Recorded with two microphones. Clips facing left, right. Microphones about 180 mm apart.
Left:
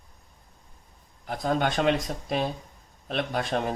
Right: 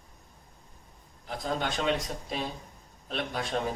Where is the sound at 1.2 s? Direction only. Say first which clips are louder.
Left 6 dB; 55° left (ahead or behind).